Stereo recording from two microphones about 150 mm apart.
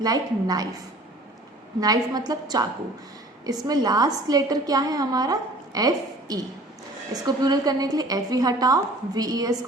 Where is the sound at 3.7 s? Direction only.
25° right (ahead or behind).